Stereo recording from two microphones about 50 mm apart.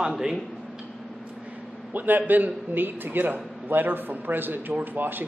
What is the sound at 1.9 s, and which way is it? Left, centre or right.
A man's voice, right.